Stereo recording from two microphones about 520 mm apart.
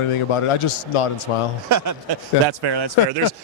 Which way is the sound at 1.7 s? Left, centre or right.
Right.